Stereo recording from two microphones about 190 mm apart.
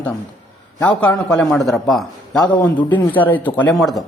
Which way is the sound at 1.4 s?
Centre (ahead or behind).